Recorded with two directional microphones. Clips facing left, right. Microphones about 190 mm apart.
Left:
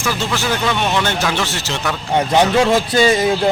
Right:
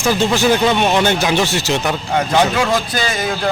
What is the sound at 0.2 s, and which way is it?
Speech, 20° right (ahead or behind).